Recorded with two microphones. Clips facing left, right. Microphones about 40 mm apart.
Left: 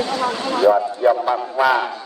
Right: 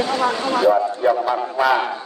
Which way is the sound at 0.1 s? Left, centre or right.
Centre.